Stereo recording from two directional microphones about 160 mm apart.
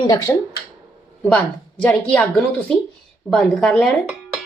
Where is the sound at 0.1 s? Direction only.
20° left (ahead or behind).